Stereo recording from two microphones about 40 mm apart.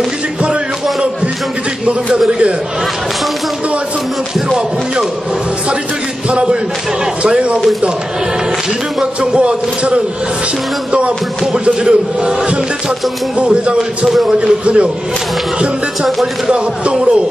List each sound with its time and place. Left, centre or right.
2.1 s music: right
4.5 s music: centre
7.2 s music: right
9.2 s music: right
16.4 s music: right